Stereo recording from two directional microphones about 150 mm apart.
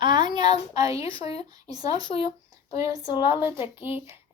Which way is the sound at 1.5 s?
25° right (ahead or behind).